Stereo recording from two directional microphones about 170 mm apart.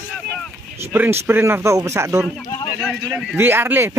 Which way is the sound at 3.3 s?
10° right (ahead or behind).